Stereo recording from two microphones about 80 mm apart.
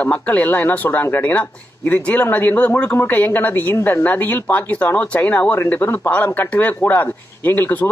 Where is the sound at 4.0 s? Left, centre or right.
Left.